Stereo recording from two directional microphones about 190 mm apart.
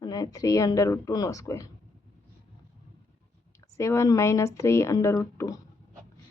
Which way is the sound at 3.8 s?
15° left (ahead or behind).